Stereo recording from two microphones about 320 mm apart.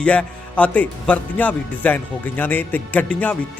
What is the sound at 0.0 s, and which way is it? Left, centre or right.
Speech, centre.